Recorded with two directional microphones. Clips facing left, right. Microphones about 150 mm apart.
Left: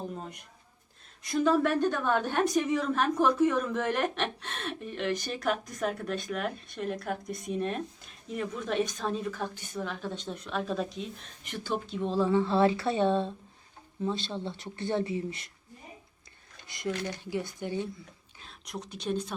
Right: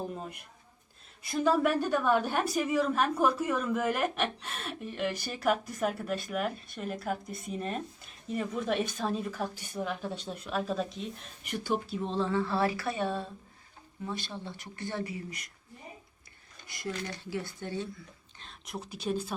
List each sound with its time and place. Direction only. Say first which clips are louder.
0.1 s a woman's voice: even; 5° right (ahead or behind)
11.4 s speech: right 2 dB; 10° right (ahead or behind)
12.0 s speech: left 6 dB; 10° left (ahead or behind); by 15.4 s 25° left (ahead or behind)
16.6 s speech: left 4 dB; 20° left (ahead or behind)
18.3 s a woman's voice: left 1 dB; centre (ahead or behind)